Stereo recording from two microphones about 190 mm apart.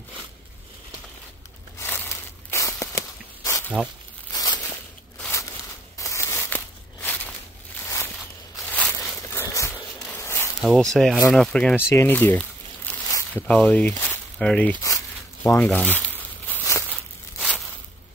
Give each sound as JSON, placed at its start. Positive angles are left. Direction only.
{"t": 1.8, "sound": "a sound", "side_deg": 10}
{"t": 9.9, "sound": "walk", "side_deg": 10}
{"t": 10.6, "sound": "speech", "side_deg": 0}
{"t": 16.4, "sound": "crumpling", "side_deg": 10}